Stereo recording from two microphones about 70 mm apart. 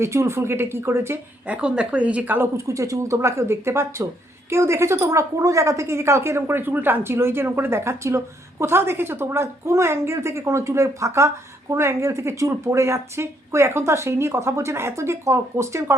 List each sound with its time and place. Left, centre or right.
0.0 s a woman's voice: right
1.5 s speech: centre
2.6 s a woman's voice: right